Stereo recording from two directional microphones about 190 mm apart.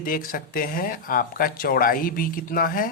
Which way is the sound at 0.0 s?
50° left (ahead or behind).